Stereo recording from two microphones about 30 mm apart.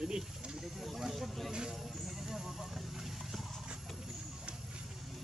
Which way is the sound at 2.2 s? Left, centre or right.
Centre.